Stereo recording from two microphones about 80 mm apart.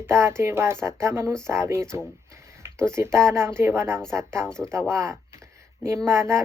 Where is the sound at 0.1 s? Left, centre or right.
Right.